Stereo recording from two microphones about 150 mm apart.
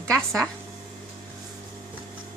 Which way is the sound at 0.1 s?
5° left (ahead or behind).